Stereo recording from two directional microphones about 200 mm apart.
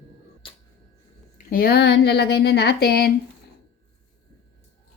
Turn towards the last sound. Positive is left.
turn(degrees=55)  # may be behind; listen again after turning